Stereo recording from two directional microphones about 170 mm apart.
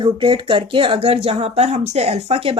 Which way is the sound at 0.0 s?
30° right (ahead or behind).